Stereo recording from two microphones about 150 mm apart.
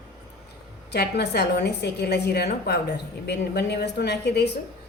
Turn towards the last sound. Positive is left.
turn(degrees=90)